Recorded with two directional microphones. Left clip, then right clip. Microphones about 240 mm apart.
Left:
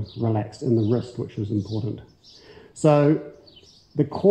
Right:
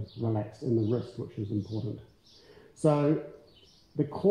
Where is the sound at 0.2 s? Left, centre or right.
Left.